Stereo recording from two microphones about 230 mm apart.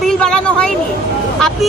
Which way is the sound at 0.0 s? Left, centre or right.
Centre.